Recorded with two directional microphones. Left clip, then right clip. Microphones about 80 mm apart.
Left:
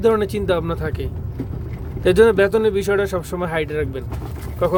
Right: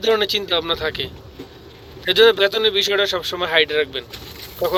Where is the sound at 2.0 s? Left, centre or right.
Left.